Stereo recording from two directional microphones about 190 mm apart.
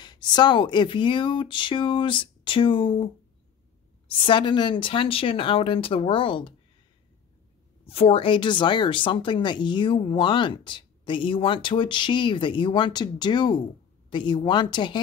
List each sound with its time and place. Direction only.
0.0 s speech: 25° left (ahead or behind)
4.1 s speech: 25° left (ahead or behind)
7.8 s speech: 30° left (ahead or behind)